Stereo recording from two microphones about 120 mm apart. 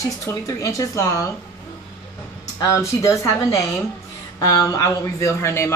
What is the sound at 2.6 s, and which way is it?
A man's voice, 25° left (ahead or behind).